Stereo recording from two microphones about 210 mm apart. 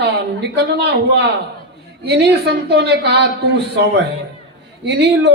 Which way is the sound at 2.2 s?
50° right (ahead or behind).